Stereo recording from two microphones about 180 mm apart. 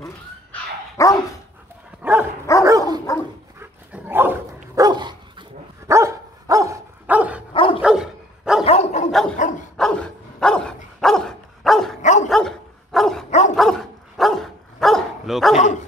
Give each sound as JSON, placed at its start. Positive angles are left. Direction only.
{"t": 0.5, "sound": "dog", "side_deg": 15}
{"t": 2.0, "sound": "dog", "side_deg": -10}
{"t": 2.5, "sound": "dog", "side_deg": 15}
{"t": 3.5, "sound": "dog", "side_deg": -10}
{"t": 7.5, "sound": "dog", "side_deg": 30}
{"t": 7.8, "sound": "dog", "side_deg": -5}
{"t": 8.6, "sound": "dog", "side_deg": 35}
{"t": 9.8, "sound": "dog", "side_deg": 5}
{"t": 12.0, "sound": "dog", "side_deg": 45}
{"t": 12.3, "sound": "dog", "side_deg": 0}
{"t": 15.5, "sound": "dog", "side_deg": 40}